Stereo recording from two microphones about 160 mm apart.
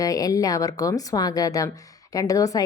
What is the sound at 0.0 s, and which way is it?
A woman's voice, 20° left (ahead or behind).